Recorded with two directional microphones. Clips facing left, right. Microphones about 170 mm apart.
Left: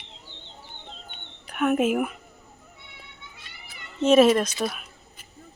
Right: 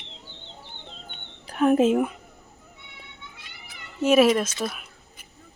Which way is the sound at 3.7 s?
10° right (ahead or behind).